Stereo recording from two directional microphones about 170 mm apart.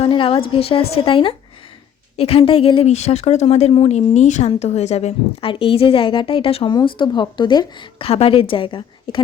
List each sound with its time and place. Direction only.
0.0 s speech: 30° left (ahead or behind)